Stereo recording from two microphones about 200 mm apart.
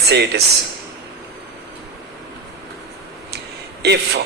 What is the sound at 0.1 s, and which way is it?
Speech, 55° right (ahead or behind).